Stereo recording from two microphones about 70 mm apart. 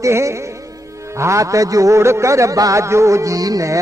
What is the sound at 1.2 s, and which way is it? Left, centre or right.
Music, right.